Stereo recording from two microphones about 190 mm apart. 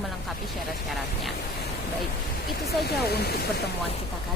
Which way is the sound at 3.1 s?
55° left (ahead or behind).